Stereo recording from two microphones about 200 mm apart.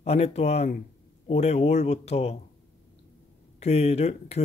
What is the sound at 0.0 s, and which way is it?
Speech, 30° left (ahead or behind).